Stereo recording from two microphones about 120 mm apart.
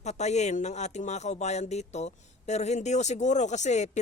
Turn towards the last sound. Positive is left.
turn(degrees=75)  # may be behind; listen again after turning